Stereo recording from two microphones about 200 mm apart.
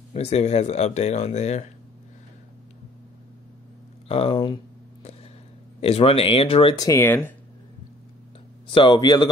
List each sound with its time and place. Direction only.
0.1 s speech: 30° left (ahead or behind)
4.1 s speech: 30° left (ahead or behind)
5.8 s speech: 30° left (ahead or behind); by 7.3 s 10° left (ahead or behind)
8.6 s speech: 25° left (ahead or behind)